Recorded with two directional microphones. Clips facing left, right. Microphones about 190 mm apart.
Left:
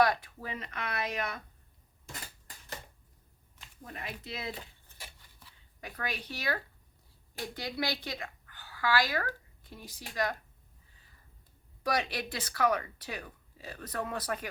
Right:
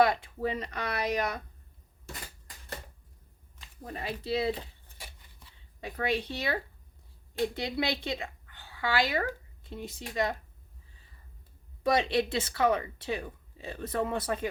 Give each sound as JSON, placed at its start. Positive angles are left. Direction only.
{"t": 0.0, "sound": "speech", "side_deg": -25}
{"t": 3.9, "sound": "speech", "side_deg": -30}
{"t": 5.8, "sound": "a woman's voice", "side_deg": -25}
{"t": 11.8, "sound": "speech", "side_deg": -25}